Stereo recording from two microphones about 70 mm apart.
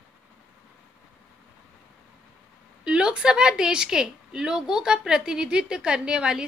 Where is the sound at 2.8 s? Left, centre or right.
Centre.